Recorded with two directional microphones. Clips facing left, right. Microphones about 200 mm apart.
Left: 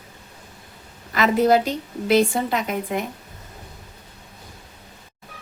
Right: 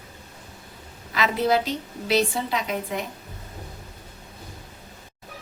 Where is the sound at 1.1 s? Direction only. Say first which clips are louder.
Left 5 dB; 50° left (ahead or behind).